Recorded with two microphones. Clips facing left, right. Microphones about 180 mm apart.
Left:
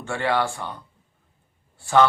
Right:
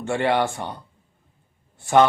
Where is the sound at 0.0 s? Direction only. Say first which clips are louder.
Right 3 dB; 20° right (ahead or behind).